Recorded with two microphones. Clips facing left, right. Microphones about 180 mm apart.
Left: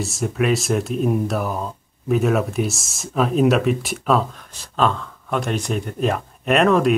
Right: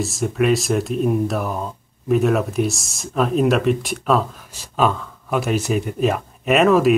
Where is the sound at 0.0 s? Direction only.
Centre (ahead or behind).